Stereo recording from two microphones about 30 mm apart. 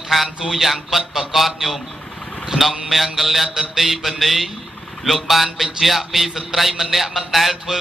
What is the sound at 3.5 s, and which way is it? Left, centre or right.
A man's voice, centre.